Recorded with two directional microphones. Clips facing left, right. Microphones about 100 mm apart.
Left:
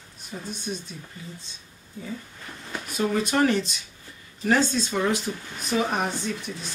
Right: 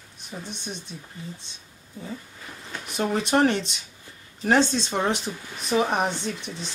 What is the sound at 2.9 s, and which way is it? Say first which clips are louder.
Speech: right 1 dB; 25° right (ahead or behind).